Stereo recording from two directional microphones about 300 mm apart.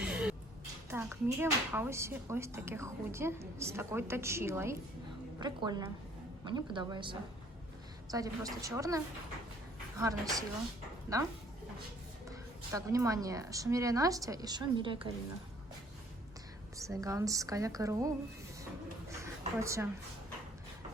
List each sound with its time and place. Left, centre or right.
0.0 s music: centre
0.9 s a woman's voice: centre
10.0 s a woman's voice: centre
12.3 s a woman's voice: centre
16.7 s a woman's voice: centre
19.1 s a sound: centre